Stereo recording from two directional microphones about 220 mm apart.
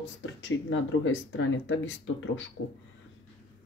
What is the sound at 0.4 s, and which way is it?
Speech, 60° left (ahead or behind).